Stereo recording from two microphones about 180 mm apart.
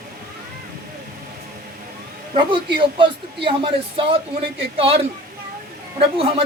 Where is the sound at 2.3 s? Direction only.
25° right (ahead or behind).